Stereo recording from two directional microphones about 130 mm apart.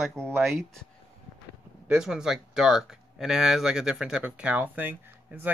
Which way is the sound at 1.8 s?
5° right (ahead or behind).